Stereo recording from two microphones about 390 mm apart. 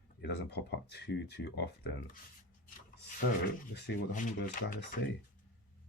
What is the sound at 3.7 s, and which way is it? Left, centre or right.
Speech, left.